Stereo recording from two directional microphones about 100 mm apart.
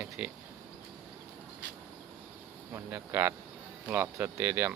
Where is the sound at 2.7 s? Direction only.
25° right (ahead or behind).